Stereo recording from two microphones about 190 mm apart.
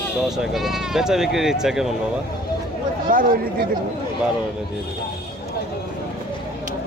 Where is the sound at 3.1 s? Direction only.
45° right (ahead or behind).